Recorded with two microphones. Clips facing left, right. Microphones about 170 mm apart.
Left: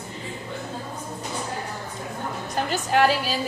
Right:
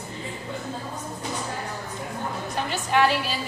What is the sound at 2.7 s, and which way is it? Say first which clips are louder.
Music: left 1 dB; 40° left (ahead or behind).